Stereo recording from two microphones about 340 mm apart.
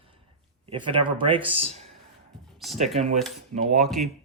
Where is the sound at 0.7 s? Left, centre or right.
Centre.